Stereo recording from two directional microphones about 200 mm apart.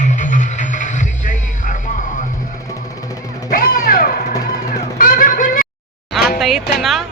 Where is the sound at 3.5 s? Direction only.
45° left (ahead or behind).